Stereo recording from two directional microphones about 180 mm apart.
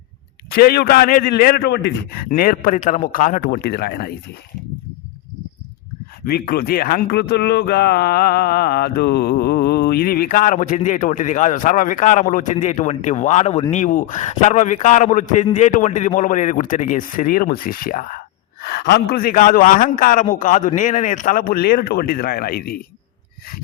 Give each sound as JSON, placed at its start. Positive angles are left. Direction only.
{"t": 0.5, "sound": "a man's voice", "side_deg": 60}
{"t": 6.2, "sound": "speech", "side_deg": 60}